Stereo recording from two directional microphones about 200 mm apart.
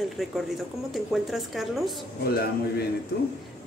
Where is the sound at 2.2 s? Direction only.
50° left (ahead or behind).